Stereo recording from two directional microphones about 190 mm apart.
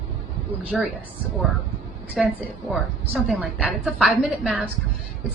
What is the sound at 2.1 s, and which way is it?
A woman's voice, centre (ahead or behind).